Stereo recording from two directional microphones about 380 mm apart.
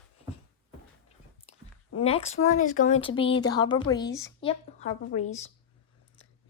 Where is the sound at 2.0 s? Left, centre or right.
Centre.